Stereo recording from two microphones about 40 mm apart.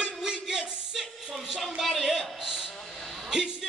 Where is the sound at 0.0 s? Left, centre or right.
Centre.